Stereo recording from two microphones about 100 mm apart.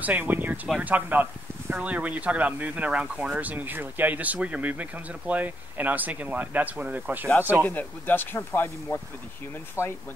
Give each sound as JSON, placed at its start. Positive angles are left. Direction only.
{"t": 0.0, "sound": "speech", "side_deg": -20}
{"t": 7.6, "sound": "speech", "side_deg": 20}
{"t": 9.8, "sound": "speech", "side_deg": 25}